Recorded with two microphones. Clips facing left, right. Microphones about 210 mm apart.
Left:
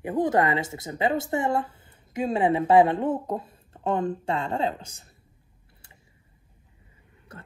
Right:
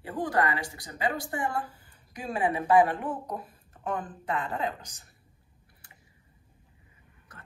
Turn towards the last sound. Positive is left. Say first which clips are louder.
# left 8 dB
turn(degrees=25)  # may be behind; listen again after turning